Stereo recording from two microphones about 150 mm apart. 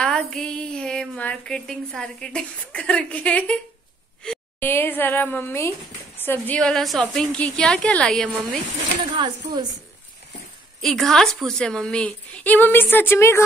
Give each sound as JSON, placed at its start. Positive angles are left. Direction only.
{"t": 0.0, "sound": "a woman's voice", "side_deg": 5}
{"t": 9.1, "sound": "speech", "side_deg": -30}
{"t": 10.8, "sound": "a woman's voice", "side_deg": 5}